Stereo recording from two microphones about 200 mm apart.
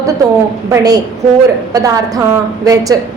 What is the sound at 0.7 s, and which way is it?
A woman's voice, 20° right (ahead or behind).